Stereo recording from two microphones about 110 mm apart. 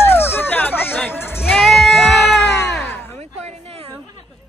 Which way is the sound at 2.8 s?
20° left (ahead or behind).